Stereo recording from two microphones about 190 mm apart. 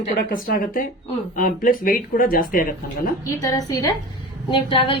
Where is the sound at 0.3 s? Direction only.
50° left (ahead or behind).